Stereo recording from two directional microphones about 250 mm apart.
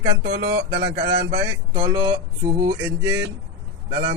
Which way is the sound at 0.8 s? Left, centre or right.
Centre.